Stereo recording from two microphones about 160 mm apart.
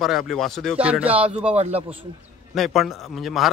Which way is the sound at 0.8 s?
10° right (ahead or behind).